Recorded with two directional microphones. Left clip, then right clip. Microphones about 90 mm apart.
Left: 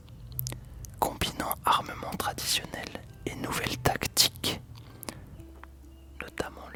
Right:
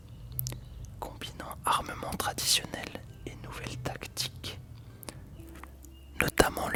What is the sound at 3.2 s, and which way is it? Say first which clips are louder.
Whispering: left 12 dB; 25° left (ahead or behind).